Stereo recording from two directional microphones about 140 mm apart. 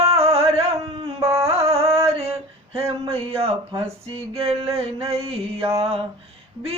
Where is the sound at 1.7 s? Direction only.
45° right (ahead or behind).